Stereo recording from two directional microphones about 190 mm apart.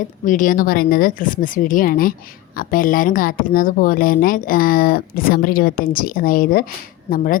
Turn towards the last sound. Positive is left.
turn(degrees=45)  # may be behind; listen again after turning